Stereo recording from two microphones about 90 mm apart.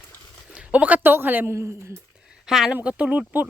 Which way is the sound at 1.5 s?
30° right (ahead or behind).